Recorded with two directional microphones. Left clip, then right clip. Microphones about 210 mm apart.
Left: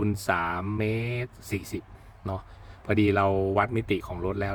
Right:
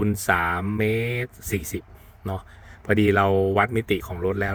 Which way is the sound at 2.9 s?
10° right (ahead or behind).